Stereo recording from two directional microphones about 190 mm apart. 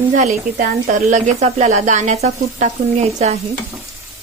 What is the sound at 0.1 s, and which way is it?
A woman's voice, 45° right (ahead or behind).